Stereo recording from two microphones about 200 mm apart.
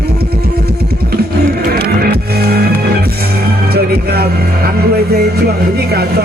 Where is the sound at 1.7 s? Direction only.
50° right (ahead or behind).